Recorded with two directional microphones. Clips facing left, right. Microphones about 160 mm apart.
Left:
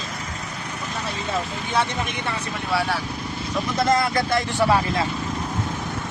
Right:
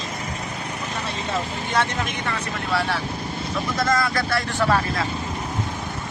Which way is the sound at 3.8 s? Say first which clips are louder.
Left 3 dB; 25° left (ahead or behind).